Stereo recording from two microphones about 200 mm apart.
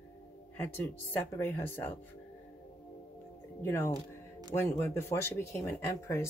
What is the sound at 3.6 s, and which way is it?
Speech, 10° left (ahead or behind).